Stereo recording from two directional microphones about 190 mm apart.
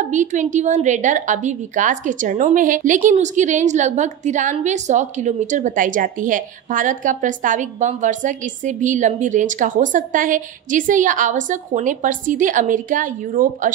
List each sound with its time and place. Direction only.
0.0 s a woman's voice: 40° right (ahead or behind)